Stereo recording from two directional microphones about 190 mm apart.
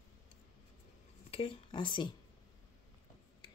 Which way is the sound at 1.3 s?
25° left (ahead or behind).